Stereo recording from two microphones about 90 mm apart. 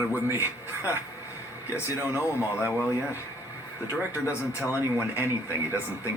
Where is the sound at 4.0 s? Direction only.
20° right (ahead or behind).